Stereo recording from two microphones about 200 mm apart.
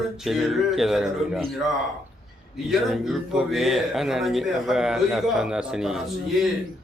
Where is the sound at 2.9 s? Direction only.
Centre (ahead or behind).